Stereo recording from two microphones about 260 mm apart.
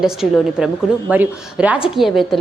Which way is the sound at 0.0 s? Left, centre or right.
Centre.